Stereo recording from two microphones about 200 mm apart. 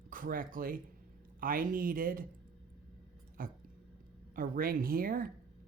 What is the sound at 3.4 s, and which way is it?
A woman's voice, 45° right (ahead or behind).